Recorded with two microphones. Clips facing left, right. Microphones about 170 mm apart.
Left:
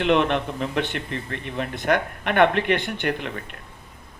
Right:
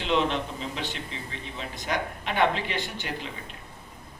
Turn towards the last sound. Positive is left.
turn(degrees=60)  # may be behind; listen again after turning